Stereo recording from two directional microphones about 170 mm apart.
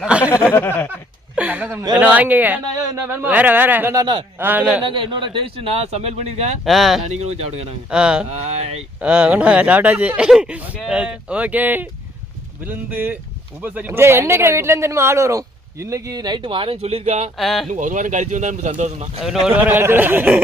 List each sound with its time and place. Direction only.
0.0 s a sound: 5° right (ahead or behind)
0.4 s speech: 10° left (ahead or behind)
1.4 s a woman's voice: 10° right (ahead or behind)
4.8 s speech: 30° right (ahead or behind)
6.7 s speech: centre (ahead or behind)
7.0 s speech: 40° right (ahead or behind)
7.9 s speech: 5° right (ahead or behind); by 17.3 s 40° right (ahead or behind)
17.3 s speech: centre (ahead or behind)
17.7 s speech: 50° right (ahead or behind)
19.2 s speech: 5° right (ahead or behind)